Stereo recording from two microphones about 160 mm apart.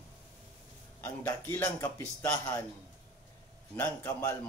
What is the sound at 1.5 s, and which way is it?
A man's voice, 20° left (ahead or behind).